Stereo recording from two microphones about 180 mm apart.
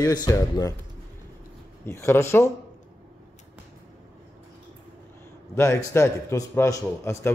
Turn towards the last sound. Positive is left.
turn(degrees=15)  # may be behind; listen again after turning